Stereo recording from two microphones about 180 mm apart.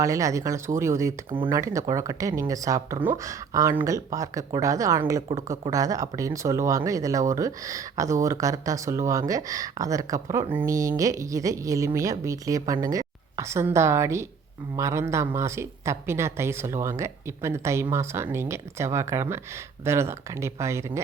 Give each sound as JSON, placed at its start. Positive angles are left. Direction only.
{"t": 0.0, "sound": "speech", "side_deg": -20}